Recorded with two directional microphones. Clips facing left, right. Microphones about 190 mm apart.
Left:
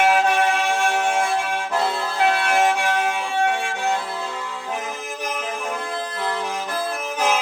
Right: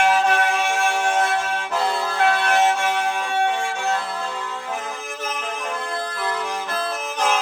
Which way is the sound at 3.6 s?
15° left (ahead or behind).